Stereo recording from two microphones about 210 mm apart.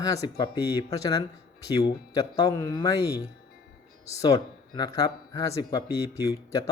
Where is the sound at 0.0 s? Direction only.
15° left (ahead or behind).